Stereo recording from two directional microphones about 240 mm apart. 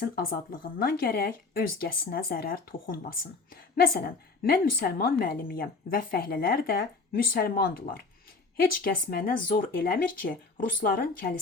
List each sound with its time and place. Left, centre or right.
0.0 s speech: left